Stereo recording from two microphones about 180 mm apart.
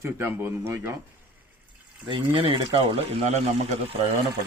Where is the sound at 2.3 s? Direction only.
30° right (ahead or behind).